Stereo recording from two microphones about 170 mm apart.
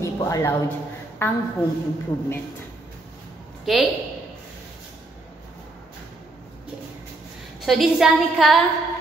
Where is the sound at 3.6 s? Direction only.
Centre (ahead or behind).